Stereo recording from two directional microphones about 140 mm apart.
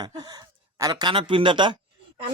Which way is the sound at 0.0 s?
30° right (ahead or behind).